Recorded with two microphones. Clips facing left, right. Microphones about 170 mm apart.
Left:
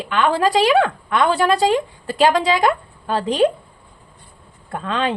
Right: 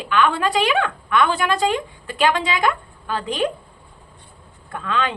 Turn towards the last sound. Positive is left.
turn(degrees=35)  # may be behind; listen again after turning